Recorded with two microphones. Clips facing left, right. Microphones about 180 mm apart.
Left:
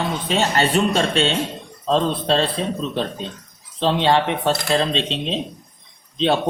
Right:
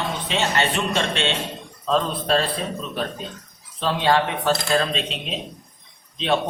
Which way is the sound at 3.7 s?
25° left (ahead or behind).